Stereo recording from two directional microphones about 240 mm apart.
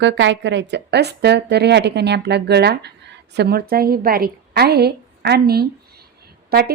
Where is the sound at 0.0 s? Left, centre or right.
Right.